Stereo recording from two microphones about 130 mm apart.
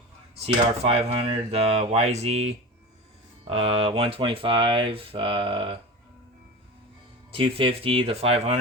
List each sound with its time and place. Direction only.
0.4 s speech: 45° right (ahead or behind)
7.3 s speech: 45° right (ahead or behind)